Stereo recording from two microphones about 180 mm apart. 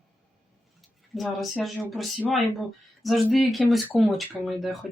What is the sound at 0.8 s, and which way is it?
Speech, centre (ahead or behind).